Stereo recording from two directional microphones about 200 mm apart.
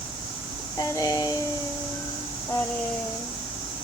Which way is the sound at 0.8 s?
15° left (ahead or behind).